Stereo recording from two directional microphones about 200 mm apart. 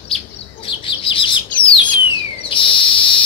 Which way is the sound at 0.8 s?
25° left (ahead or behind).